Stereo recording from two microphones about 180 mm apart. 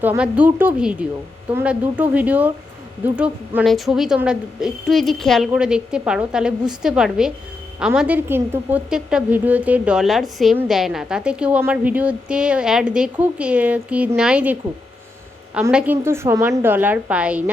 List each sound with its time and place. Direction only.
0.0 s a woman's voice: 10° right (ahead or behind)
15.7 s a woman's voice: 10° right (ahead or behind)